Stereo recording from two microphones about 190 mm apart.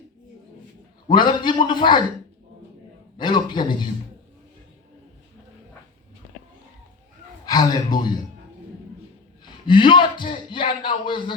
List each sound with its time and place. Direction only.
1.1 s a man's voice: 25° left (ahead or behind)
3.2 s a man's voice: 25° left (ahead or behind)
7.4 s a man's voice: 20° left (ahead or behind)
9.6 s a man's voice: 25° left (ahead or behind)